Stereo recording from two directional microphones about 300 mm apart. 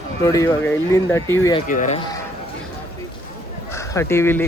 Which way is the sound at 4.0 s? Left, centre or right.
Centre.